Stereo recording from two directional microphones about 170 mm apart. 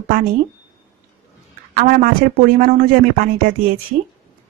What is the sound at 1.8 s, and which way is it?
Speech, 55° right (ahead or behind).